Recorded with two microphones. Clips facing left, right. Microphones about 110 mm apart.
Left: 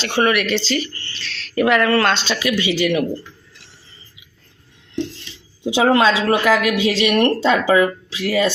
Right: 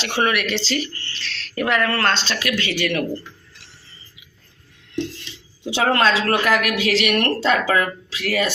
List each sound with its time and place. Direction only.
0.0 s speech: centre (ahead or behind)
2.1 s speech: 15° left (ahead or behind)
5.7 s speech: 15° left (ahead or behind)